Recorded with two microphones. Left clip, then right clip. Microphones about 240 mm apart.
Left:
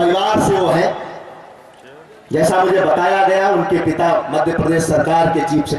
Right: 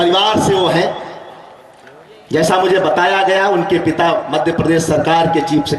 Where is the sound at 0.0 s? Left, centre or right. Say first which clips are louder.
Right 2 dB; centre.